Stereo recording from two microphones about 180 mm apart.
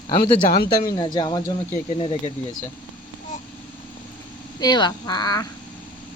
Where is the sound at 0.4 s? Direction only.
55° left (ahead or behind).